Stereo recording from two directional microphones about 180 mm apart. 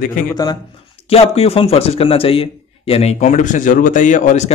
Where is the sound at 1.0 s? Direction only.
35° left (ahead or behind).